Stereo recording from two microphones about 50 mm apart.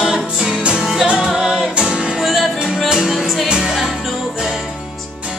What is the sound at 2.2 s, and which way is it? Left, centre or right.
Music, centre.